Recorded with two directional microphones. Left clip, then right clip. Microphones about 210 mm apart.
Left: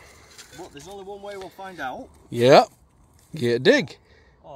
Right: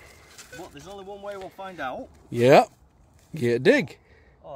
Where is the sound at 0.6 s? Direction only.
5° right (ahead or behind).